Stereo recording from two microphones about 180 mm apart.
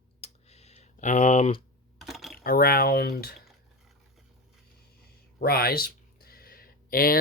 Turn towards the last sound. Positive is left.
turn(degrees=55)  # may be behind; listen again after turning